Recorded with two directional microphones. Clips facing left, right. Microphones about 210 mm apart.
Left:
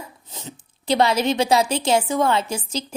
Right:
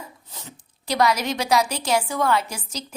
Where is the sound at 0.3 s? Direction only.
20° left (ahead or behind).